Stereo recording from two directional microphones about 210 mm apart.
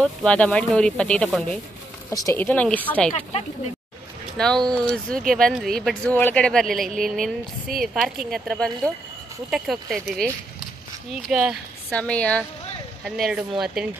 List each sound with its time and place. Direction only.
0.0 s speech: 5° left (ahead or behind)
3.1 s speech: 30° left (ahead or behind)
4.7 s speech: 5° left (ahead or behind)
11.2 s speech: centre (ahead or behind)